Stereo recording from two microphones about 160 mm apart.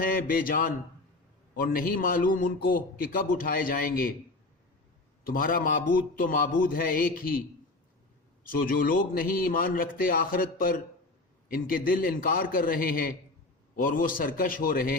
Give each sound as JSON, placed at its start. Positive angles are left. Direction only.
{"t": 0.0, "sound": "a man's voice", "side_deg": 65}
{"t": 5.2, "sound": "a man's voice", "side_deg": 60}
{"t": 8.4, "sound": "a man's voice", "side_deg": 65}